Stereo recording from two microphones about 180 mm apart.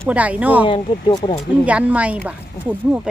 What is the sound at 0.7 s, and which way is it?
Speech, 25° left (ahead or behind).